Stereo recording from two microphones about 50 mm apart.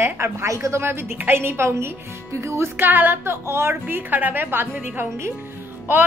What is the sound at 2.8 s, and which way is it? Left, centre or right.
A woman's voice, right.